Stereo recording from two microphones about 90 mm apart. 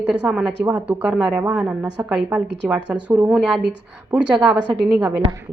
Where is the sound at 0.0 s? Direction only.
10° right (ahead or behind).